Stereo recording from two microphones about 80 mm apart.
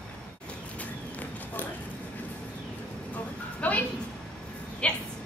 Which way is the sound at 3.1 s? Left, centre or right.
Centre.